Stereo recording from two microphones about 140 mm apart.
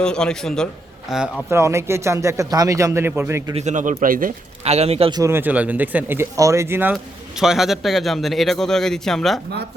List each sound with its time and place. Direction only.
0.0 s speech: 5° left (ahead or behind)
1.5 s a man's voice: 20° right (ahead or behind)
3.5 s speech: 55° right (ahead or behind); by 4.4 s 80° right
4.6 s a man's voice: 50° right (ahead or behind)
5.1 s speech: 20° right (ahead or behind)
6.9 s speech: 5° right (ahead or behind)